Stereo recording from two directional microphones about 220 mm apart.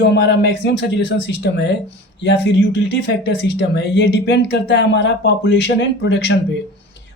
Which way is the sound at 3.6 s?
50° left (ahead or behind).